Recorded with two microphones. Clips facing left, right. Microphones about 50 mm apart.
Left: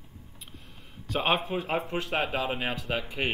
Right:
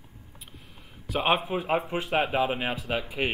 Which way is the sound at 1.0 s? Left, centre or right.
Centre.